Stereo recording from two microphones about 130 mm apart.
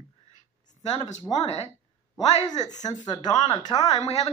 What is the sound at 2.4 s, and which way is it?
Speech, 30° left (ahead or behind).